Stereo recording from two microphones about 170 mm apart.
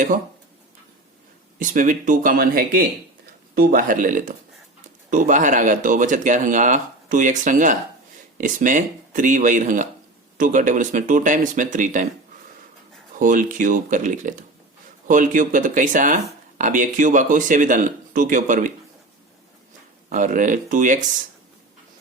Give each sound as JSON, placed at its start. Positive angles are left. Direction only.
{"t": 1.5, "sound": "speech", "side_deg": -50}
{"t": 13.1, "sound": "speech", "side_deg": -50}
{"t": 20.1, "sound": "speech", "side_deg": -50}